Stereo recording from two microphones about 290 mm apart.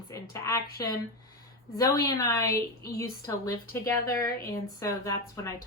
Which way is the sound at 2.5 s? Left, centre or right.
Left.